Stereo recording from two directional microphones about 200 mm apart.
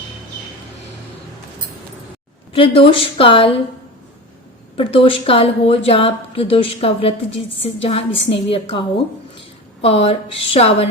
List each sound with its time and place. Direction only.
2.5 s a woman's voice: 25° left (ahead or behind)
4.8 s a woman's voice: 25° left (ahead or behind)
9.8 s a woman's voice: 30° left (ahead or behind)